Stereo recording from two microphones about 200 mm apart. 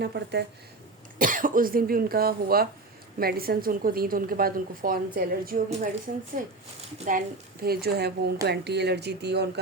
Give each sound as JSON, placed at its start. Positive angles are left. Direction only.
{"t": 0.0, "sound": "speech", "side_deg": -55}
{"t": 1.2, "sound": "a woman's voice", "side_deg": -40}
{"t": 7.6, "sound": "a woman's voice", "side_deg": -50}